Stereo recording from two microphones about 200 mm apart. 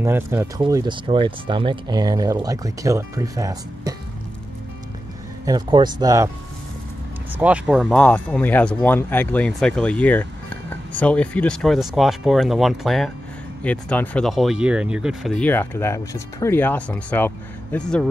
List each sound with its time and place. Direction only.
0.0 s speech: 10° right (ahead or behind)
5.4 s speech: 20° right (ahead or behind)
7.3 s speech: 5° right (ahead or behind)
7.8 s speech: 5° left (ahead or behind)